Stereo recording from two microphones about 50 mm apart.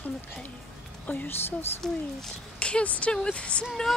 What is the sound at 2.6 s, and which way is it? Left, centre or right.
Speech, left.